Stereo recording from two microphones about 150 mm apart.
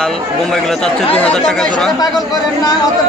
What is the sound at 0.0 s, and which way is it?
A man's voice, 5° left (ahead or behind).